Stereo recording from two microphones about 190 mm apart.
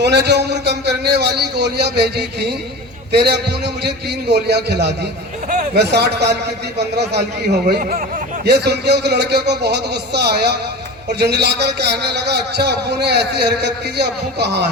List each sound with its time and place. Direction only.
0.0 s a man's voice: 60° right (ahead or behind)